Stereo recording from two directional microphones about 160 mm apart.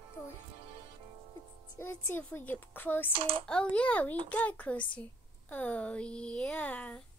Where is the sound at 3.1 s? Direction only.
35° right (ahead or behind).